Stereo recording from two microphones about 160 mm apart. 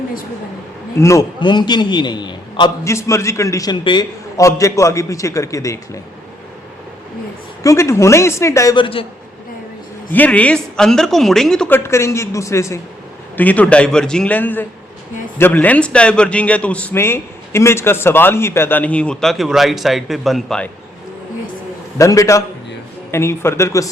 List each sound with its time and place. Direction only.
0.9 s a man's voice: 20° left (ahead or behind)
1.4 s a man's voice: 30° left (ahead or behind)
7.6 s a man's voice: 20° left (ahead or behind)
8.7 s a man's voice: 35° left (ahead or behind)
10.1 s speech: 10° left (ahead or behind)
11.8 s a man's voice: 15° left (ahead or behind); by 20.7 s centre (ahead or behind)
21.9 s a man's voice: 20° left (ahead or behind)